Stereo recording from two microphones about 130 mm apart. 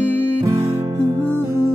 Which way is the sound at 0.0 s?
15° left (ahead or behind).